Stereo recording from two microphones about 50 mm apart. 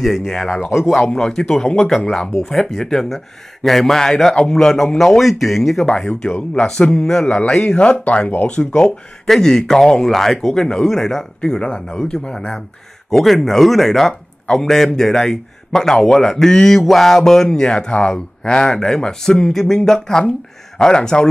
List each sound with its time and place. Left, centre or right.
0.0 s a man's voice: centre
5.9 s a man's voice: centre